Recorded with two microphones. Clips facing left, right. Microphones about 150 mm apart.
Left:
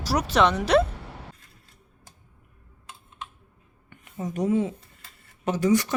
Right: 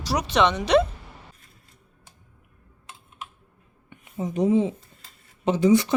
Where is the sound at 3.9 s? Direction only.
15° right (ahead or behind).